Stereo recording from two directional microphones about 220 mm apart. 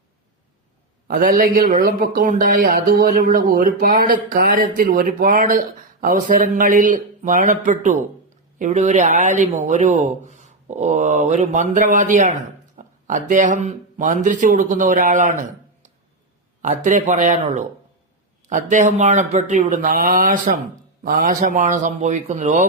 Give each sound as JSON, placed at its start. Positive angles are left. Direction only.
{"t": 1.0, "sound": "speech", "side_deg": -40}